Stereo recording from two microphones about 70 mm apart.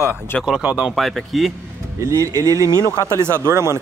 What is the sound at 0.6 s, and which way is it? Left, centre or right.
Speech, centre.